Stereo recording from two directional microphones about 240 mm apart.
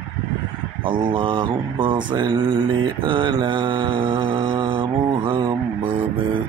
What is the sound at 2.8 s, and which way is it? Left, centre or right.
Mantra, centre.